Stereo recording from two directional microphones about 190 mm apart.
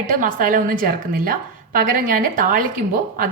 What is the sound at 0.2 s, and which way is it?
A woman's voice, 45° right (ahead or behind).